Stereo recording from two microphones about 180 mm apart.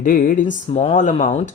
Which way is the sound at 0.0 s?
50° left (ahead or behind).